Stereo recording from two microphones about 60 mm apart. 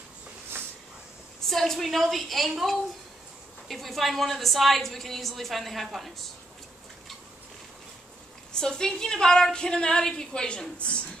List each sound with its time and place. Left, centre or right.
1.5 s a woman's voice: centre
8.5 s a woman's voice: centre